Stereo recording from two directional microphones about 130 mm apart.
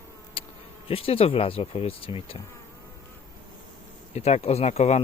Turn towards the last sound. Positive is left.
turn(degrees=55)  # may be behind; listen again after turning